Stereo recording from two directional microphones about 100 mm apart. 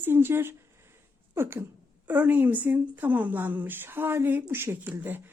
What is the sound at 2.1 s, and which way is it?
Speech, 15° right (ahead or behind).